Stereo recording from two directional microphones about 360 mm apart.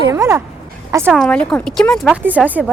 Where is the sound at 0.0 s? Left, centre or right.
Centre.